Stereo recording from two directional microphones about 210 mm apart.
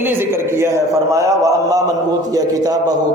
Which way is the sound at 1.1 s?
15° right (ahead or behind).